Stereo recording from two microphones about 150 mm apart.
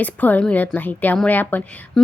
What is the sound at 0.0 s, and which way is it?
A woman's voice, 10° left (ahead or behind).